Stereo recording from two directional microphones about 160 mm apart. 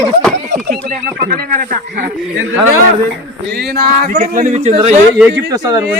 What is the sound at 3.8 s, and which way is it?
Speech, 55° right (ahead or behind).